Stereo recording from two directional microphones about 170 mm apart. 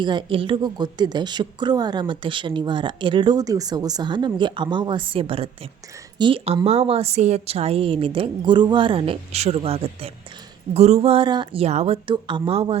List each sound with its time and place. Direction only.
0.0 s a woman's voice: 30° right (ahead or behind)